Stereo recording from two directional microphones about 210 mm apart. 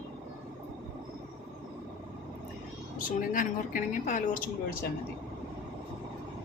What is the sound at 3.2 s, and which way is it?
A woman's voice, 40° left (ahead or behind).